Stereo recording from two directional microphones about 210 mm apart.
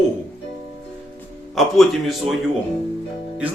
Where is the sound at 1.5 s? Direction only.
Centre (ahead or behind).